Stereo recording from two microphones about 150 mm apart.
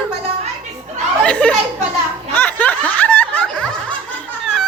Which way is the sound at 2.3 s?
10° left (ahead or behind).